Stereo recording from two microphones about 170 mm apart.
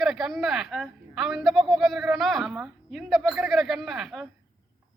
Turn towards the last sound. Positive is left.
turn(degrees=0)  # may be behind; listen again after turning